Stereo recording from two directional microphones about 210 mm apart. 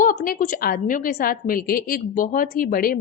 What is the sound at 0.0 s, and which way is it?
A woman's voice, 40° left (ahead or behind).